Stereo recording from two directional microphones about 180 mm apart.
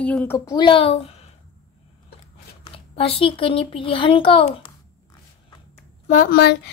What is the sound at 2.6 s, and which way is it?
A child's voice, 30° left (ahead or behind).